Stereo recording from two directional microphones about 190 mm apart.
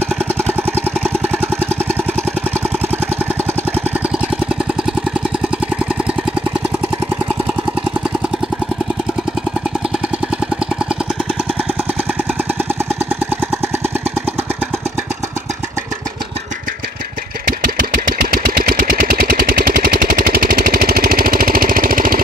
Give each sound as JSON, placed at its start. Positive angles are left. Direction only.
{"t": 17.5, "sound": "engine", "side_deg": -50}